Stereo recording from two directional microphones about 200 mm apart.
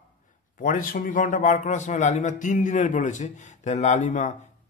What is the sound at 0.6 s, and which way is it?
A man's voice, 40° left (ahead or behind).